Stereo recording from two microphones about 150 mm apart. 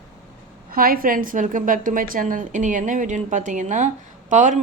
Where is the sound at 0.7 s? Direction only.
75° right (ahead or behind).